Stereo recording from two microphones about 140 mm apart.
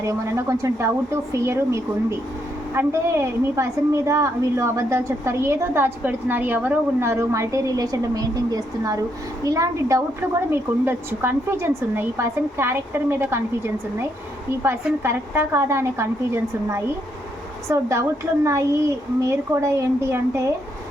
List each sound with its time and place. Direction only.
0.0 s a woman's voice: 20° right (ahead or behind)
14.6 s a woman's voice: 15° right (ahead or behind)